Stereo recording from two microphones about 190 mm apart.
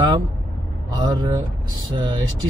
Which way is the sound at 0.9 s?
20° right (ahead or behind).